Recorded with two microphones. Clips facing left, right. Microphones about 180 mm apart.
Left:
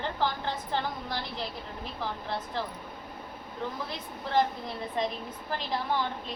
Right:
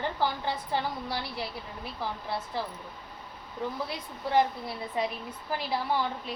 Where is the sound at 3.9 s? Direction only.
10° right (ahead or behind).